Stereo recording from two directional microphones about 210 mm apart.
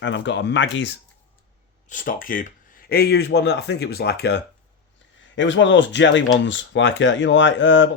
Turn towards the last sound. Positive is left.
turn(degrees=60)  # may be behind; listen again after turning